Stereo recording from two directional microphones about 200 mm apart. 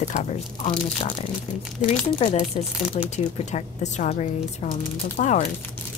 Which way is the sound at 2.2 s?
30° left (ahead or behind).